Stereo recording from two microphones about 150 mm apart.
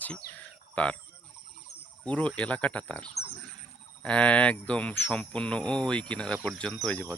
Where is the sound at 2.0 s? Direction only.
10° left (ahead or behind).